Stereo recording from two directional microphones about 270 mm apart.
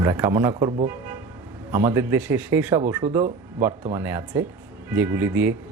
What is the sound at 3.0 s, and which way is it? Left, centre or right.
Speech, right.